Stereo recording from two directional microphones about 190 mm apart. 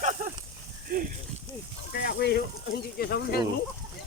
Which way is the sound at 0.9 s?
50° right (ahead or behind).